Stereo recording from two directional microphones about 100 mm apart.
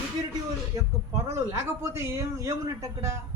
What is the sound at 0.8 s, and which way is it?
A man's voice, 30° right (ahead or behind).